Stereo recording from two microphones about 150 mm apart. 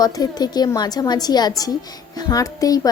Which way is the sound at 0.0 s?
25° left (ahead or behind).